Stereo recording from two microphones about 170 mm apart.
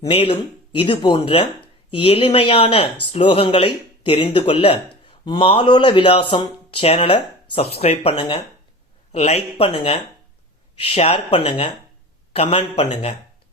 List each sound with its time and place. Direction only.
0.1 s speech: 30° left (ahead or behind)
9.1 s speech: 40° left (ahead or behind)